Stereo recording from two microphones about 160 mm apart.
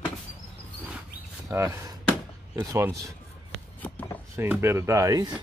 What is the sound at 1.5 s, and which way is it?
A man's voice, 20° right (ahead or behind).